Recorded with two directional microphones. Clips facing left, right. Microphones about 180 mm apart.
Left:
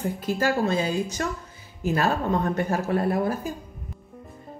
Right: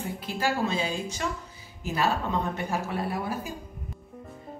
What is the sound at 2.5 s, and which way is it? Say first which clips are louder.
A woman's voice: left 6 dB; 50° left (ahead or behind).